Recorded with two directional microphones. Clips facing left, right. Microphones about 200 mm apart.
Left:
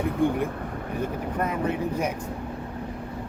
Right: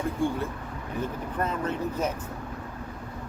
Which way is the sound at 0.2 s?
20° left (ahead or behind).